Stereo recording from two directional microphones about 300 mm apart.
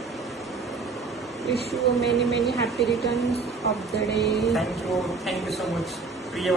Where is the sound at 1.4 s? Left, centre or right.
Centre.